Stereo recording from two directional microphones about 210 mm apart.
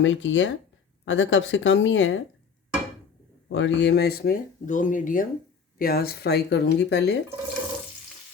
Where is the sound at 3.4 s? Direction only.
60° left (ahead or behind).